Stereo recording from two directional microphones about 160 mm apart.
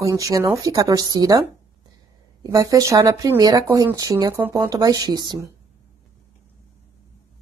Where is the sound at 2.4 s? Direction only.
20° right (ahead or behind).